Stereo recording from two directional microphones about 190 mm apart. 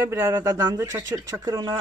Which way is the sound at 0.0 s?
10° right (ahead or behind).